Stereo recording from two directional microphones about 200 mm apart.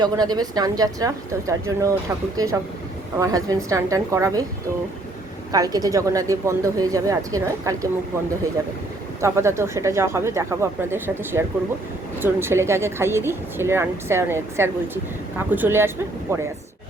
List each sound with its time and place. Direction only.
0.0 s speech: 20° right (ahead or behind)
5.5 s speech: 20° right (ahead or behind)
9.2 s speech: 15° right (ahead or behind)